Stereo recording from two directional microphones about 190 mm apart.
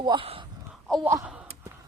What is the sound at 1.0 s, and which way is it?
Sigh, 10° right (ahead or behind).